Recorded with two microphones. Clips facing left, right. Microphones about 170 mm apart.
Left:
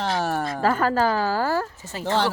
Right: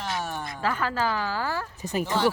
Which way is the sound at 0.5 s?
45° left (ahead or behind).